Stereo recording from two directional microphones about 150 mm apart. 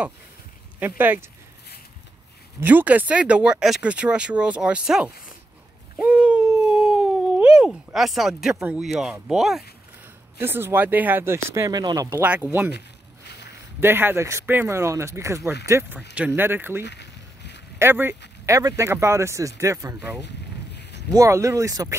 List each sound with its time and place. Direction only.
0.7 s speech: 15° right (ahead or behind)
2.6 s speech: 10° right (ahead or behind)
5.9 s cat: 10° right (ahead or behind)
9.1 s speech: 5° right (ahead or behind)
10.4 s speech: 15° right (ahead or behind)
12.2 s speech: 10° right (ahead or behind)
12.7 s a sound: 90° left
13.7 s speech: 15° right (ahead or behind)